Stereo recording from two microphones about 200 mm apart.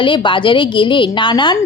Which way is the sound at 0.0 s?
25° left (ahead or behind).